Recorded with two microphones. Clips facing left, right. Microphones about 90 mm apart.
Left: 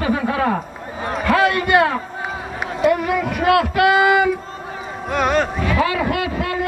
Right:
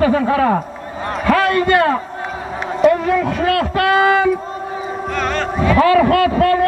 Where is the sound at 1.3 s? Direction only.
15° left (ahead or behind).